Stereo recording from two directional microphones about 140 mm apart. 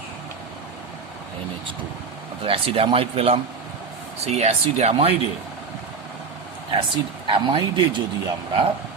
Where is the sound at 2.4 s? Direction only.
45° right (ahead or behind).